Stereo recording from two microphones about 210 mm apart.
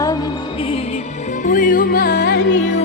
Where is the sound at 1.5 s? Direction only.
40° left (ahead or behind); by 2.6 s 55° left (ahead or behind).